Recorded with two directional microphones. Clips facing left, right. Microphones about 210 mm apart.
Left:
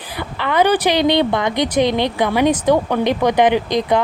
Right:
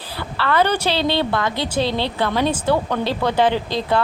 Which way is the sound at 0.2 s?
15° left (ahead or behind).